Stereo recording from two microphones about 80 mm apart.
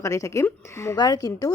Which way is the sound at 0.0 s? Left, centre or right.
Left.